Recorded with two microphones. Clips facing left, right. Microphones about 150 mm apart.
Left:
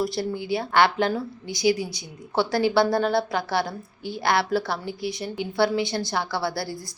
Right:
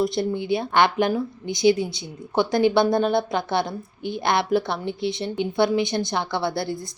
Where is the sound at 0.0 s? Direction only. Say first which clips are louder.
Right 3 dB; 20° right (ahead or behind).